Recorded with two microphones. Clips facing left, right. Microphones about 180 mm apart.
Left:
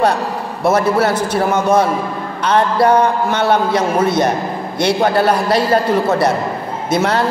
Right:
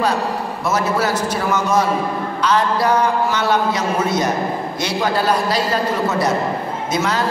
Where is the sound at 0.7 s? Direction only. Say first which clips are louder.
Left 6 dB; 60° left (ahead or behind).